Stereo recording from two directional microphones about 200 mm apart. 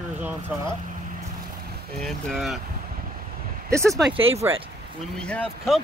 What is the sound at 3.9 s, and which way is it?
Speech, 25° right (ahead or behind).